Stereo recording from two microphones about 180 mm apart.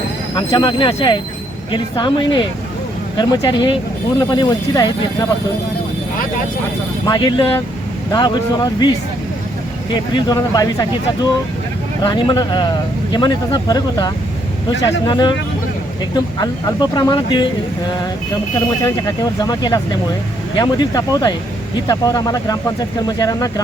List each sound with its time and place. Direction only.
0.3 s speech: 25° left (ahead or behind)
7.1 s speech: 25° left (ahead or behind)
9.9 s speech: 25° left (ahead or behind)
16.4 s speech: 20° left (ahead or behind)
18.9 s speech: 20° left (ahead or behind)